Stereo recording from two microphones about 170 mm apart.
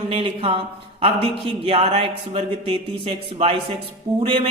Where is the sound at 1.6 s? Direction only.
35° right (ahead or behind).